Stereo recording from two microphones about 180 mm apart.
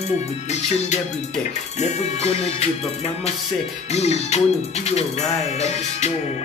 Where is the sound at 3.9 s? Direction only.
35° left (ahead or behind).